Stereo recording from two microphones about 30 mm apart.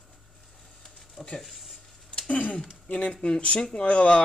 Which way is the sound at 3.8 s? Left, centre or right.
Left.